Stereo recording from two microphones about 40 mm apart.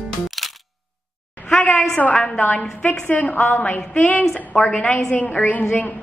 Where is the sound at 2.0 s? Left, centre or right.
Left.